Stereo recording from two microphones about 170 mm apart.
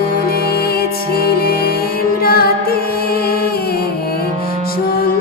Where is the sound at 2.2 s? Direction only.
65° left (ahead or behind).